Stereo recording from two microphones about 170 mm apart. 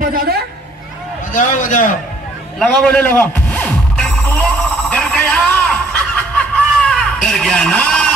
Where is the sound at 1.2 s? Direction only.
50° left (ahead or behind).